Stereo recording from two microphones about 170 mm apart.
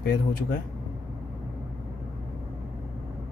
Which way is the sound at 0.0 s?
60° left (ahead or behind).